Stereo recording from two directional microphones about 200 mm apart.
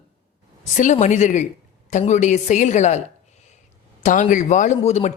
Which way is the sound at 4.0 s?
40° left (ahead or behind).